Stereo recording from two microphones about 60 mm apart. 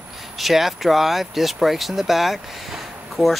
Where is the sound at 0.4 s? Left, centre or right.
Centre.